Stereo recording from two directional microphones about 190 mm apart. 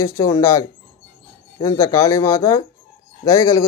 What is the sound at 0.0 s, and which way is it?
Speech, 15° left (ahead or behind).